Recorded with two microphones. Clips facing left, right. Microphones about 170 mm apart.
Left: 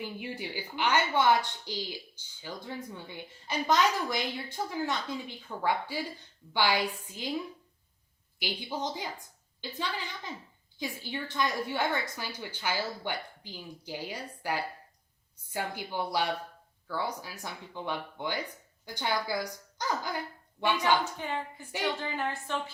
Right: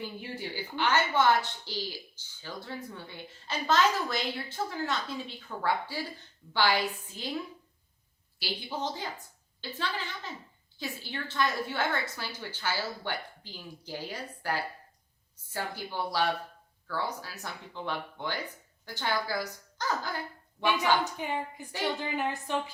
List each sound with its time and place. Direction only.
0.0 s a woman's voice: 15° left (ahead or behind)
8.4 s a woman's voice: 15° left (ahead or behind)
20.8 s a woman's voice: 15° right (ahead or behind)